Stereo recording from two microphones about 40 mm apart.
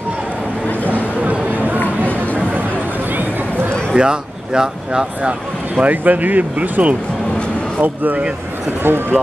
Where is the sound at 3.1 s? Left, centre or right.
Right.